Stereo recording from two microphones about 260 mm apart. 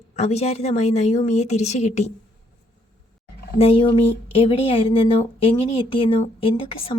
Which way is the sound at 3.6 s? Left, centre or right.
Left.